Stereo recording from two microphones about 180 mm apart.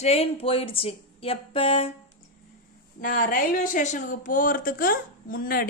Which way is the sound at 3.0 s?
50° left (ahead or behind).